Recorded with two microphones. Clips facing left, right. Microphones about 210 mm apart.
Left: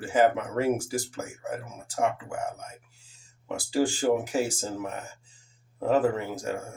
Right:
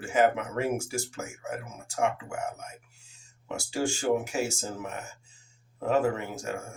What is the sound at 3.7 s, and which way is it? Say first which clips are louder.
Speech: left 3 dB; 35° left (ahead or behind).